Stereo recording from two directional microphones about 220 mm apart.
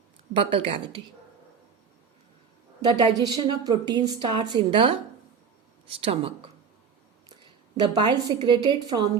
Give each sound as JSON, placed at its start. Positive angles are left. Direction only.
{"t": 0.3, "sound": "a woman's voice", "side_deg": -25}
{"t": 2.8, "sound": "a woman's voice", "side_deg": -20}
{"t": 7.8, "sound": "a woman's voice", "side_deg": -20}